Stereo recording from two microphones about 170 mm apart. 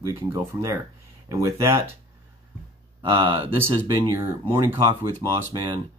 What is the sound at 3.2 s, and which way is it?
Speech, 30° right (ahead or behind).